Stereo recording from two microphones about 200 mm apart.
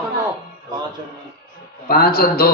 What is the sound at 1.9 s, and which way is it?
Speech, 50° left (ahead or behind).